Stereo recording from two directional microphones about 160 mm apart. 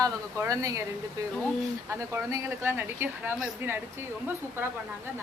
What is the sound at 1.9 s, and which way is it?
A woman's voice, 15° right (ahead or behind).